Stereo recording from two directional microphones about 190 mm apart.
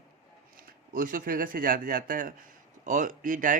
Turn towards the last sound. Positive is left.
turn(degrees=-45)  # may be behind; listen again after turning